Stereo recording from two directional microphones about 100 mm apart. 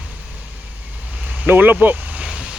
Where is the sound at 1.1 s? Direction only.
10° right (ahead or behind).